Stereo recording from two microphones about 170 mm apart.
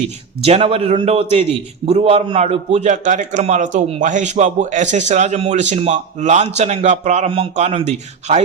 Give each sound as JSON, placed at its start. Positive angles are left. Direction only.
{"t": 0.4, "sound": "a man's voice", "side_deg": -35}